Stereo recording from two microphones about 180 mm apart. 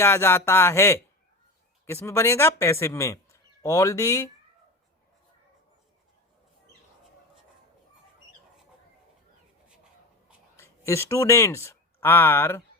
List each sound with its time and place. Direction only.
0.0 s speech: 15° left (ahead or behind)
10.6 s speech: 15° left (ahead or behind)